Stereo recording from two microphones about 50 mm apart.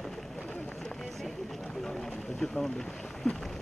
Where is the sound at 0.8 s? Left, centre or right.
Centre.